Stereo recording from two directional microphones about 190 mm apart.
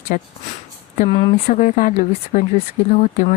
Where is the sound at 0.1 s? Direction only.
45° left (ahead or behind).